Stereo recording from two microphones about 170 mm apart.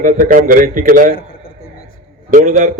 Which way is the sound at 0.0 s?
55° right (ahead or behind).